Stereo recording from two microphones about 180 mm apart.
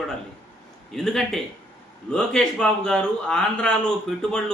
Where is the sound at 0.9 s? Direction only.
Centre (ahead or behind).